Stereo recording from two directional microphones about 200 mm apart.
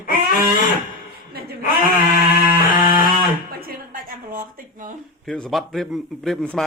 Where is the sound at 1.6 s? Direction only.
45° left (ahead or behind).